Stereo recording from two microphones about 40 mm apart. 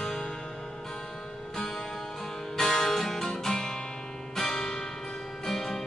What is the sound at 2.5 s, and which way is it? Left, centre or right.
Music, centre.